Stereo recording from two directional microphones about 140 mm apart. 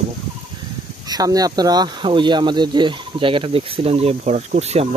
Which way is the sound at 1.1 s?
25° right (ahead or behind).